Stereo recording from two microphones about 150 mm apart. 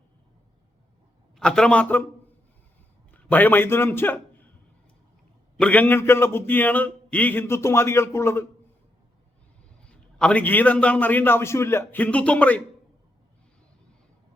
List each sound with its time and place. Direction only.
1.4 s a man's voice: 5° left (ahead or behind)
3.1 s a man's voice: 10° left (ahead or behind)
5.5 s a man's voice: 10° left (ahead or behind)
9.8 s a man's voice: 5° left (ahead or behind)